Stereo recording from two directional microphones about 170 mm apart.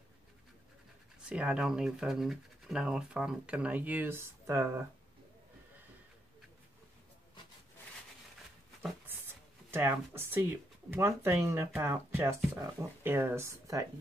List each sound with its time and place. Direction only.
1.2 s speech: 5° right (ahead or behind)
9.7 s speech: 15° right (ahead or behind)